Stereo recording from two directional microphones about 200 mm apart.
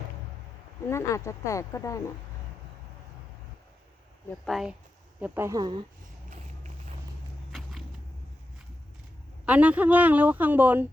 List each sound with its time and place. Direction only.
0.9 s speech: 15° left (ahead or behind)
4.3 s speech: centre (ahead or behind)
5.2 s speech: 10° right (ahead or behind)
7.5 s walk: centre (ahead or behind)
9.5 s speech: 5° right (ahead or behind)